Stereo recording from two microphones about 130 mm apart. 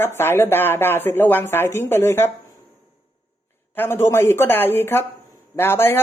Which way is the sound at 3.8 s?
20° left (ahead or behind).